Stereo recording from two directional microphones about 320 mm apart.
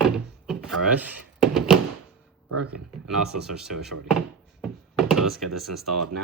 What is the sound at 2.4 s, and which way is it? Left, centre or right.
Speech, right.